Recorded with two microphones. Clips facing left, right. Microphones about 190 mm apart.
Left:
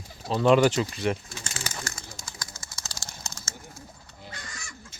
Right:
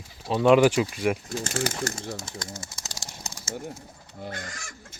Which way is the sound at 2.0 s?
75° right (ahead or behind).